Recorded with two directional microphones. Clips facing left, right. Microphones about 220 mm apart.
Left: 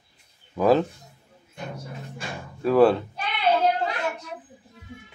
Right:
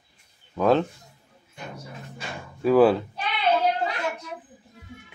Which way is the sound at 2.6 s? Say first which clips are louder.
Even; centre (ahead or behind).